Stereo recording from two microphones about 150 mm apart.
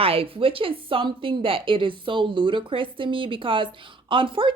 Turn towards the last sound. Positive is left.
turn(degrees=-35)  # may be behind; listen again after turning